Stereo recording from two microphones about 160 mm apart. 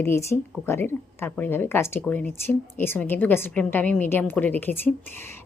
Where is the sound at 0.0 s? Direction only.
15° left (ahead or behind).